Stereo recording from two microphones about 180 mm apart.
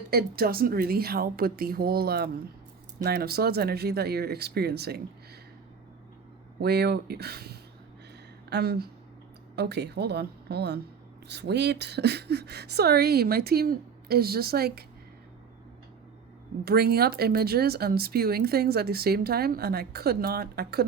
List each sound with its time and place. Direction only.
0.1 s speech: 60° right (ahead or behind)
6.6 s a woman's voice: 65° right (ahead or behind)
16.6 s speech: 60° right (ahead or behind)